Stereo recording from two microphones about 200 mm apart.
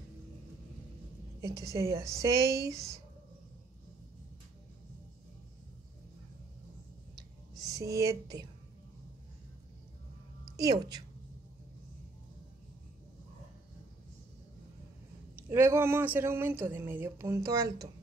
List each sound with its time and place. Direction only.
1.4 s speech: 15° right (ahead or behind)
7.2 s a sound: 15° right (ahead or behind)
10.5 s a woman's voice: 15° right (ahead or behind)
15.3 s speech: 10° right (ahead or behind)